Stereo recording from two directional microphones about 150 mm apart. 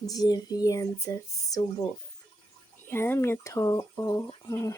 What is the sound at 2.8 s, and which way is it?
Speech, 15° left (ahead or behind).